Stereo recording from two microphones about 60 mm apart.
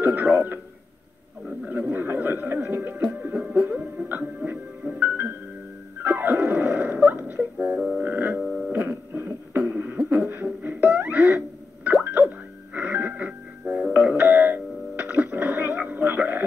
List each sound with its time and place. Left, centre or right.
0.0 s a sound: right
1.6 s music: right
3.3 s music: centre
6.0 s dog: right
7.2 s music: right
8.4 s a sound: centre
8.7 s a sound: right
9.7 s beatboxing: right
10.3 s music: right
13.9 s doorbell: right